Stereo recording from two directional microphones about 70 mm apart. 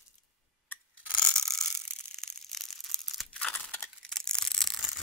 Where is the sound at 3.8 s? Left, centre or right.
Centre.